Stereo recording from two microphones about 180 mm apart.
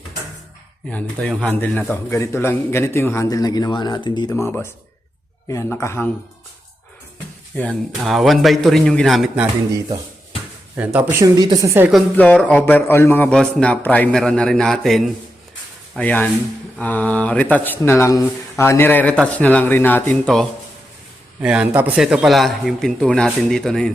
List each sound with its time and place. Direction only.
0.9 s a man's voice: 5° left (ahead or behind)
7.5 s speech: 5° left (ahead or behind)
10.8 s speech: 10° right (ahead or behind)
11.3 s a woman's voice: 20° right (ahead or behind)
12.1 s a man's voice: 5° left (ahead or behind)
21.4 s speech: 5° right (ahead or behind)